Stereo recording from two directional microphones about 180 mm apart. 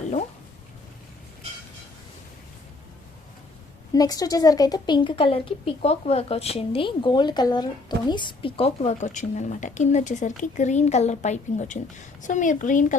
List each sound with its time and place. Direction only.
3.9 s a woman's voice: 20° left (ahead or behind); by 13.0 s 45° left (ahead or behind)